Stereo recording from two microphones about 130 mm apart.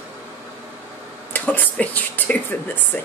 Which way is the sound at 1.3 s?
15° left (ahead or behind).